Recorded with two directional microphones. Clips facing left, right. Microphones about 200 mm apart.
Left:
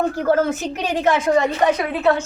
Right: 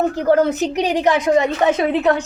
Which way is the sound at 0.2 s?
20° right (ahead or behind).